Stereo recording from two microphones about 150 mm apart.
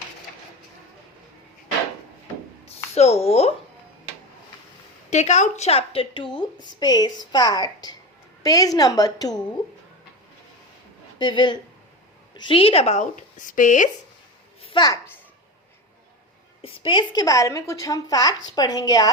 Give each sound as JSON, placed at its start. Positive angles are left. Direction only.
{"t": 2.6, "sound": "speech", "side_deg": 45}
{"t": 5.1, "sound": "a woman's voice", "side_deg": 50}
{"t": 11.2, "sound": "a woman's voice", "side_deg": 30}
{"t": 14.6, "sound": "a sound", "side_deg": 30}
{"t": 16.6, "sound": "a woman's voice", "side_deg": 35}